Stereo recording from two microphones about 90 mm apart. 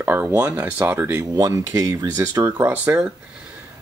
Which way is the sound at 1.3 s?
45° right (ahead or behind).